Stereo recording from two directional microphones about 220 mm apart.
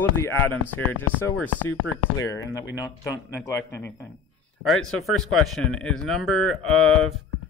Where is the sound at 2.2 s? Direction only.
15° left (ahead or behind).